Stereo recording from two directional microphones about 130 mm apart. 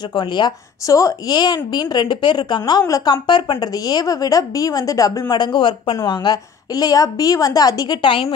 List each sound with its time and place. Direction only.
0.1 s a woman's voice: 35° left (ahead or behind)